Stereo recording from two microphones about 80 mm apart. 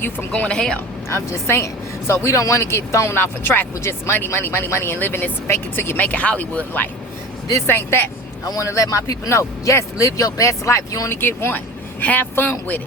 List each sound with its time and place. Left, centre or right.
0.3 s speech: centre
1.1 s speech: left; by 6.6 s centre
7.7 s speech: left
8.4 s speech: left
11.2 s speech: left